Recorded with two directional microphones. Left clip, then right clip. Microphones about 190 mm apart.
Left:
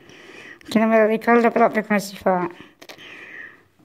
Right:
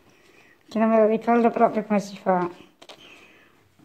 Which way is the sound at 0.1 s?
55° left (ahead or behind).